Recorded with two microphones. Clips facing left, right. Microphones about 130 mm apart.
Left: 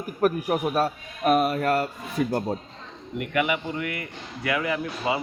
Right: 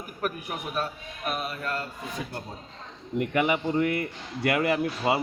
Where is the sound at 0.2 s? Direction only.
40° left (ahead or behind); by 1.9 s 55° left (ahead or behind).